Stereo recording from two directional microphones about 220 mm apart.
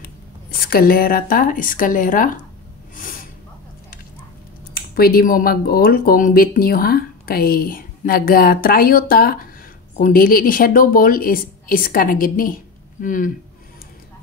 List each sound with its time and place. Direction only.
0.0 s speech: 40° left (ahead or behind)
3.0 s snort: 40° left (ahead or behind)
4.7 s speech: 40° left (ahead or behind)